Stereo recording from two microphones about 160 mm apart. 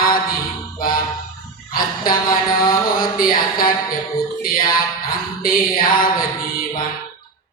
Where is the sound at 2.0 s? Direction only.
25° left (ahead or behind).